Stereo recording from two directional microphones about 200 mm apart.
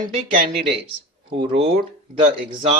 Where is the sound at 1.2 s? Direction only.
25° right (ahead or behind).